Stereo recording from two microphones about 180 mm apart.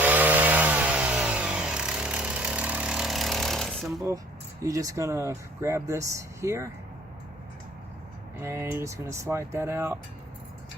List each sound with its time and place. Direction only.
0.0 s chainsaw: 10° right (ahead or behind)
4.6 s speech: 20° right (ahead or behind)
8.4 s speech: 15° right (ahead or behind)